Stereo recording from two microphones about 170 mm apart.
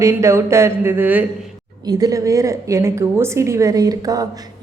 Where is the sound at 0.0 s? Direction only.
15° right (ahead or behind).